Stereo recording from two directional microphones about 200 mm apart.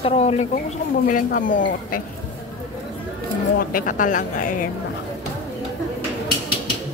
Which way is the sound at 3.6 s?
45° left (ahead or behind).